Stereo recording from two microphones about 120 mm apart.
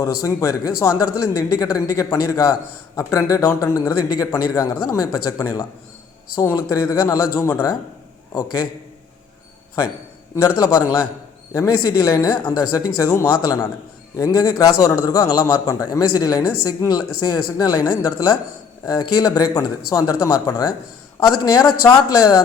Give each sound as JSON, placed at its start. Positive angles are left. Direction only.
{"t": 0.0, "sound": "speech", "side_deg": 25}
{"t": 11.5, "sound": "a man's voice", "side_deg": 25}